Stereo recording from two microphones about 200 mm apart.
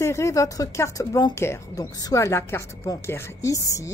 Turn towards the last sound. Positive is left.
turn(degrees=15)  # may be behind; listen again after turning